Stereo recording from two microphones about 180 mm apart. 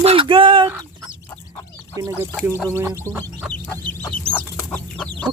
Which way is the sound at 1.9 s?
15° right (ahead or behind).